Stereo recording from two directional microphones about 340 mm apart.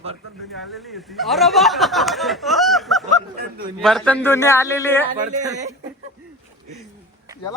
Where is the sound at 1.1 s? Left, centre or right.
Centre.